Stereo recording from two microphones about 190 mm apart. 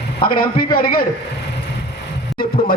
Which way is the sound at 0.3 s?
50° left (ahead or behind).